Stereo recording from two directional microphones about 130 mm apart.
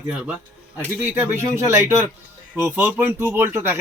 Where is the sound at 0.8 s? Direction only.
15° right (ahead or behind).